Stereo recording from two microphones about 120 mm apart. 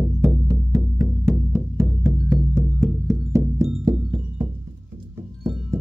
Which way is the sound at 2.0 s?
20° right (ahead or behind).